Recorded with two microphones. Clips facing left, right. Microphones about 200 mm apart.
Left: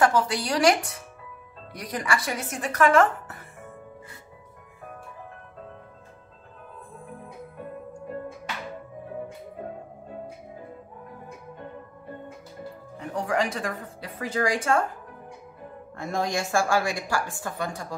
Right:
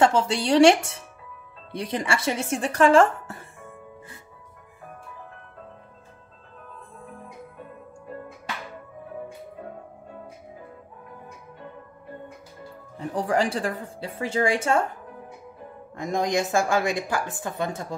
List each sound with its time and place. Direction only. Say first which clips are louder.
0.0 s a woman's voice: right 2 dB; 25° right (ahead or behind)
13.1 s a woman's voice: right 3 dB; 30° right (ahead or behind)
16.0 s a woman's voice: right 3 dB; 15° right (ahead or behind)